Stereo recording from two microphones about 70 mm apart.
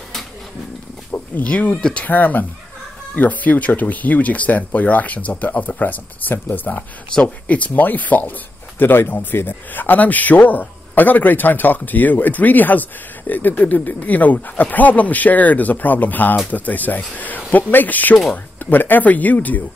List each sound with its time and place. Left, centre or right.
1.1 s a sound: left
1.8 s speech: centre
2.0 s speech: left